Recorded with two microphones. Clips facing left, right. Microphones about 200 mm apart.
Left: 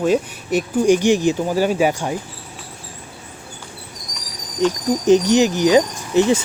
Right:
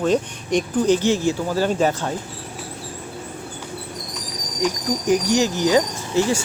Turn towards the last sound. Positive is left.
turn(degrees=20)  # may be behind; listen again after turning